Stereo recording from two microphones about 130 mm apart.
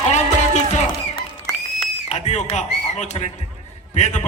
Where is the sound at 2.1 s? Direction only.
60° left (ahead or behind).